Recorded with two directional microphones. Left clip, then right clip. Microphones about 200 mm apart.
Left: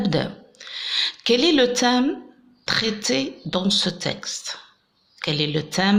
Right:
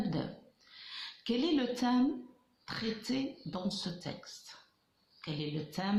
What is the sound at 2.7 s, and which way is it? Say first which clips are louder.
Speech: left 16 dB; 30° left (ahead or behind).